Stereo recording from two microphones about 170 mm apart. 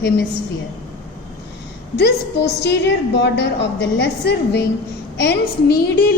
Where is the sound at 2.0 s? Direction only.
75° left (ahead or behind).